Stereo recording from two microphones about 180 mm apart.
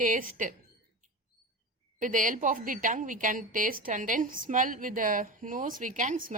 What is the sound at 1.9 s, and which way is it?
A woman's voice, 45° right (ahead or behind).